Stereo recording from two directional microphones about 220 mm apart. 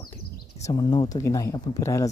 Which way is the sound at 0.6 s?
20° left (ahead or behind).